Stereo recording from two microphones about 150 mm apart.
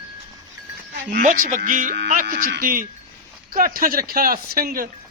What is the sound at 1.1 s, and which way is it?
Speech, 65° right (ahead or behind).